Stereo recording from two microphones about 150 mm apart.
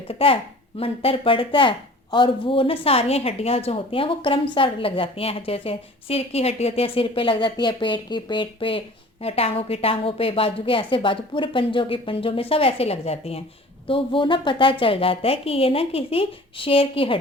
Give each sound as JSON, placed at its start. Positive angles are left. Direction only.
{"t": 0.1, "sound": "a woman's voice", "side_deg": 40}